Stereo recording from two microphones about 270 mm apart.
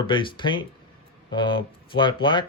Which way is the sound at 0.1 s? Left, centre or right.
Centre.